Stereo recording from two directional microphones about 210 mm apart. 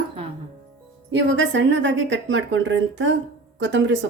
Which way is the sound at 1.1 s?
60° right (ahead or behind).